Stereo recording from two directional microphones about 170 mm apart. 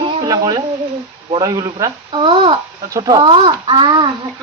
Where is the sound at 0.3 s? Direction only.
20° right (ahead or behind).